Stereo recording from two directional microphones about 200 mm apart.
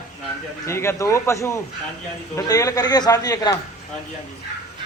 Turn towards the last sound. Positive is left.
turn(degrees=20)  # may be behind; listen again after turning